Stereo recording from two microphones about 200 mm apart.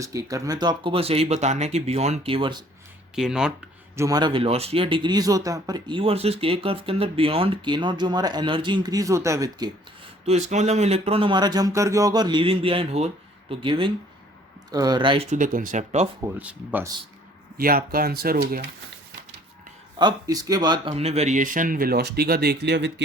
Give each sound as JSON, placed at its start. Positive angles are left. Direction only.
{"t": 0.0, "sound": "speech", "side_deg": -15}
{"t": 3.2, "sound": "speech", "side_deg": -5}
{"t": 3.9, "sound": "speech", "side_deg": -15}
{"t": 10.2, "sound": "speech", "side_deg": -35}
{"t": 16.2, "sound": "speech", "side_deg": -10}
{"t": 17.6, "sound": "speech", "side_deg": -50}
{"t": 20.0, "sound": "speech", "side_deg": -20}
{"t": 20.9, "sound": "speech", "side_deg": -30}